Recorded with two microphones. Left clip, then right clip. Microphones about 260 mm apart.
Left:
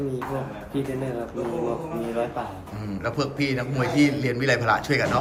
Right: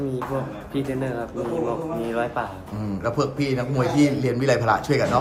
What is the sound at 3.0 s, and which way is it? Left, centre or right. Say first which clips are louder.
A man's voice: right 2 dB; centre.